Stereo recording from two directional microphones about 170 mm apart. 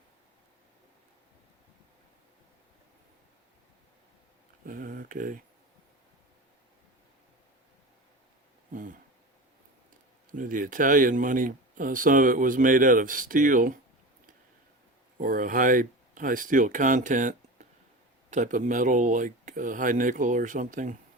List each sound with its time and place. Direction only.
4.6 s speech: 55° right (ahead or behind)
8.7 s a sound: 50° right (ahead or behind)
10.3 s speech: 50° right (ahead or behind)
15.2 s speech: 55° right (ahead or behind)